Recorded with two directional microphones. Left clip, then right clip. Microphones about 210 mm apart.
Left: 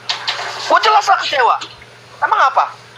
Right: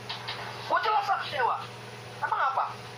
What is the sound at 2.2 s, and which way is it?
Speech, 45° left (ahead or behind).